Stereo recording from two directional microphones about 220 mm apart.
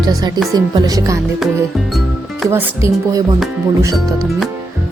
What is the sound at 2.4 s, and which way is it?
Speech, 10° right (ahead or behind).